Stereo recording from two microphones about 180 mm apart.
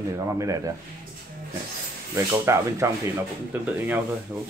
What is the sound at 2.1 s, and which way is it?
Speech, 15° right (ahead or behind).